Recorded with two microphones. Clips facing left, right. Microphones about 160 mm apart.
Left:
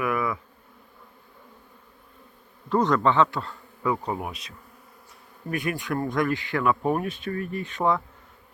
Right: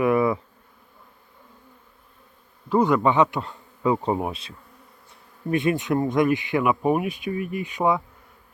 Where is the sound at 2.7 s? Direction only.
5° right (ahead or behind).